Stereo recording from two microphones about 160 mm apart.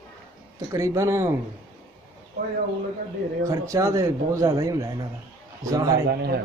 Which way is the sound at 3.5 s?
20° right (ahead or behind).